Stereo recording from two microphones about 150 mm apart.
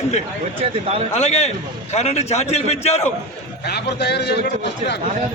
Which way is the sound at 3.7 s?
90° left.